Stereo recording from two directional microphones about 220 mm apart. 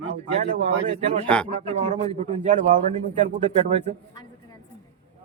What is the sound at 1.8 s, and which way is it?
A man's voice, 30° right (ahead or behind).